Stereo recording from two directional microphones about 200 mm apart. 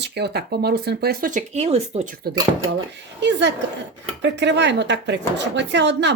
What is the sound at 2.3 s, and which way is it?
Speech, 50° right (ahead or behind).